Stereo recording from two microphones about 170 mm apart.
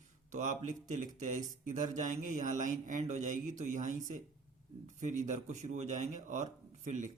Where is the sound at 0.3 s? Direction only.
45° right (ahead or behind).